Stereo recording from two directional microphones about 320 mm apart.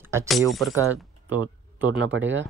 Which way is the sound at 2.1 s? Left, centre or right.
Right.